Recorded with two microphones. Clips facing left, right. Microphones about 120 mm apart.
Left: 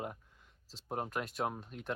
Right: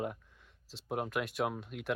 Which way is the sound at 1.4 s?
35° left (ahead or behind).